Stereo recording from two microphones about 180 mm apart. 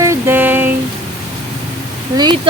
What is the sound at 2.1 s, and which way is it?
Speech, 25° right (ahead or behind).